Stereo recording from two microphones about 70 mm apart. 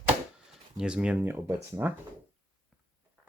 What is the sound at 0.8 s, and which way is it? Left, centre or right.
Speech, centre.